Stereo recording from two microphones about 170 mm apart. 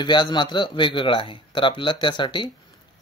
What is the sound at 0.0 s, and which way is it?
Speech, 25° left (ahead or behind).